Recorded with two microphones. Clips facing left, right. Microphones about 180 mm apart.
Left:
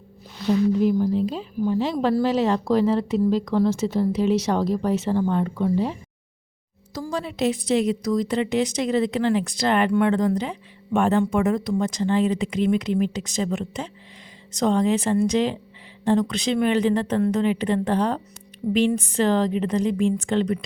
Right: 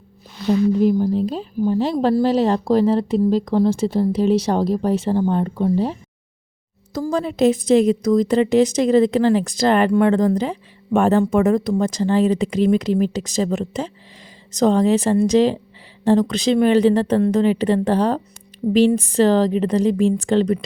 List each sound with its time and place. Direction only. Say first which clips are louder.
0.4 s a woman's voice: right 3 dB; 35° right (ahead or behind)
6.9 s a woman's voice: right 7 dB; 45° right (ahead or behind)